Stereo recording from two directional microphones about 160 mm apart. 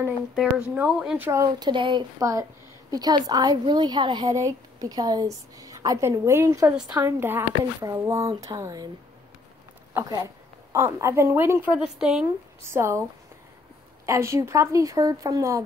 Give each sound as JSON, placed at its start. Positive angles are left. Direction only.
{"t": 0.4, "sound": "a woman's voice", "side_deg": -5}
{"t": 9.9, "sound": "a woman's voice", "side_deg": -20}
{"t": 12.6, "sound": "a woman's voice", "side_deg": -15}
{"t": 14.0, "sound": "a woman's voice", "side_deg": -20}